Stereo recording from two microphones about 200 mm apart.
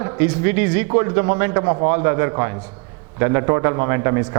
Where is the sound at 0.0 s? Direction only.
20° right (ahead or behind).